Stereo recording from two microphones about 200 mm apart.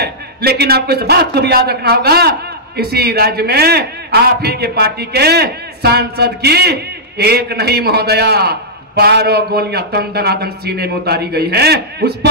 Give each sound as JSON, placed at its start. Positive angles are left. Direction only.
{"t": 0.0, "sound": "a man's voice", "side_deg": -55}